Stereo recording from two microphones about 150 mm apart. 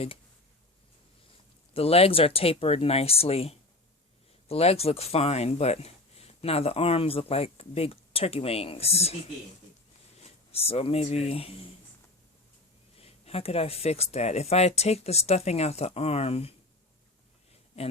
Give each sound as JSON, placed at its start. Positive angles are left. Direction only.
{"t": 1.7, "sound": "speech", "side_deg": 40}
{"t": 10.2, "sound": "speech", "side_deg": 45}
{"t": 13.0, "sound": "speech", "side_deg": 40}